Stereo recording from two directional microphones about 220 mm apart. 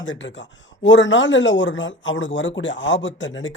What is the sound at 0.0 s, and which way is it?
Speech, 55° left (ahead or behind).